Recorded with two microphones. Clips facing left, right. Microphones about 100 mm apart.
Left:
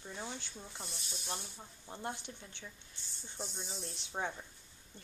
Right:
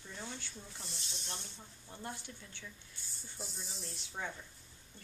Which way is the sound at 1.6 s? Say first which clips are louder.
Left 4 dB; 25° left (ahead or behind).